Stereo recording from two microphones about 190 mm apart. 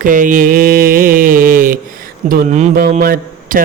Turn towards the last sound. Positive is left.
turn(degrees=-50)  # may be behind; listen again after turning